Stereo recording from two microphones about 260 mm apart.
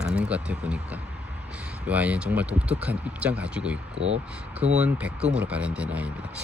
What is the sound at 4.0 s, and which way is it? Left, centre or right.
Speech, right.